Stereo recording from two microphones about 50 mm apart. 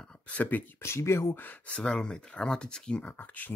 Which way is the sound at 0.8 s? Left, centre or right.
Left.